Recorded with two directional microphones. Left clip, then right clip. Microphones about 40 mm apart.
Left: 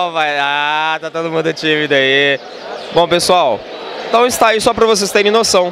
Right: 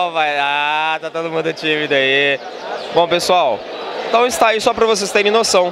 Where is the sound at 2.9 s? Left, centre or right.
Left.